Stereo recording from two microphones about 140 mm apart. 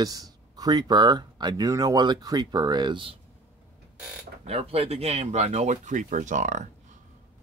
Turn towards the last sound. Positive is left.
turn(degrees=-60)  # may be behind; listen again after turning